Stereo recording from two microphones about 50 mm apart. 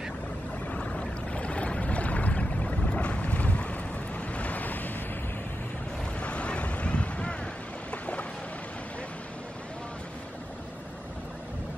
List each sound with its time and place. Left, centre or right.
0.7 s boat: left
6.1 s boat: left